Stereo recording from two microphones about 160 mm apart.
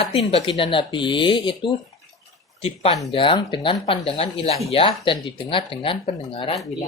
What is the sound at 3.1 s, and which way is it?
Speech, 30° left (ahead or behind).